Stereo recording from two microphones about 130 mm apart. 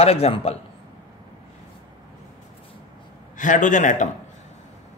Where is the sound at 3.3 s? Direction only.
75° left (ahead or behind).